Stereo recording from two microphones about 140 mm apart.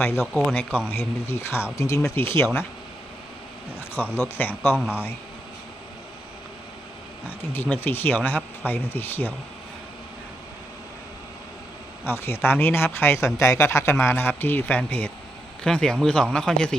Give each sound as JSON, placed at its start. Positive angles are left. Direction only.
{"t": 0.0, "sound": "speech", "side_deg": 15}
{"t": 3.9, "sound": "speech", "side_deg": 15}
{"t": 4.7, "sound": "speech", "side_deg": -10}
{"t": 7.3, "sound": "speech", "side_deg": 15}
{"t": 12.0, "sound": "speech", "side_deg": 15}